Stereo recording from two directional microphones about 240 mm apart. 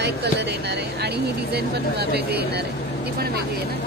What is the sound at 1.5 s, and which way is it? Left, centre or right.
Speech, right.